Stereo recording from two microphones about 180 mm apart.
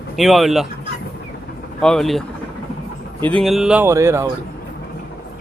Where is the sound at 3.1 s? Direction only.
25° right (ahead or behind).